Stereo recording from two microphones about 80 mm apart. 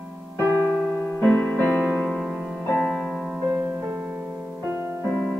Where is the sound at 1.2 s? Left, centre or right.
Centre.